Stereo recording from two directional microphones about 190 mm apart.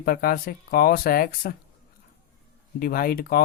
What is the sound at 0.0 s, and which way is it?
Speech, 50° left (ahead or behind).